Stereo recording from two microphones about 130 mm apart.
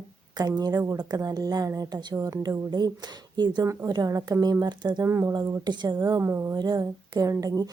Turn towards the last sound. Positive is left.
turn(degrees=-30)  # may be behind; listen again after turning